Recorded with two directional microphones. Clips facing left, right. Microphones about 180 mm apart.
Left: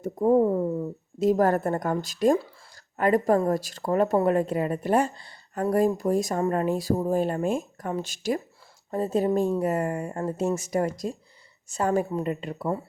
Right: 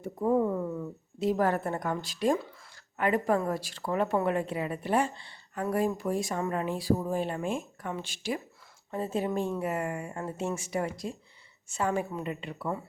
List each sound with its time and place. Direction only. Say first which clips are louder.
0.0 s a woman's voice: left 6 dB; 40° left (ahead or behind)